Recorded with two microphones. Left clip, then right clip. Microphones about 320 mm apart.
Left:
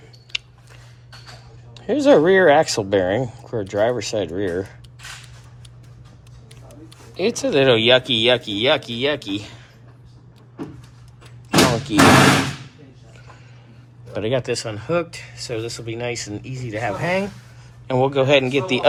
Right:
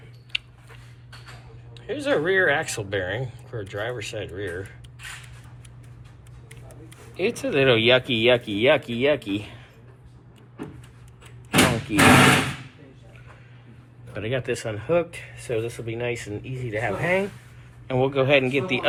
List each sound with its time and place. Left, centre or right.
1.7 s speech: centre
7.1 s speech: centre
11.9 s speech: centre
14.1 s speech: centre